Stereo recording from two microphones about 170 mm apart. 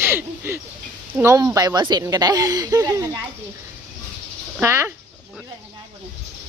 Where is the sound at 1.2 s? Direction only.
20° right (ahead or behind).